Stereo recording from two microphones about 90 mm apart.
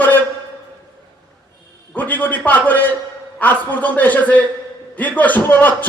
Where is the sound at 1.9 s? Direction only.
20° left (ahead or behind).